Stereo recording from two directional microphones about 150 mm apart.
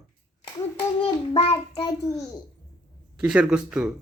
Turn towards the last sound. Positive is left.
turn(degrees=-5)  # may be behind; listen again after turning